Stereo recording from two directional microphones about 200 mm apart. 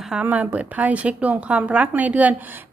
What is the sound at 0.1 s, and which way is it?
A woman's voice, 5° right (ahead or behind).